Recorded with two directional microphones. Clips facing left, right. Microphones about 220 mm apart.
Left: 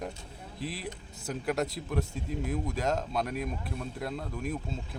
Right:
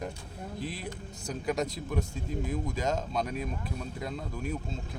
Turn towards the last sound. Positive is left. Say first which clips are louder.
# left 1 dB
turn(degrees=5)  # may be behind; listen again after turning